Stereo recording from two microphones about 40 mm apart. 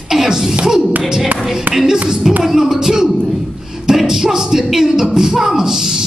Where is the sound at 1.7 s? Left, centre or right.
Centre.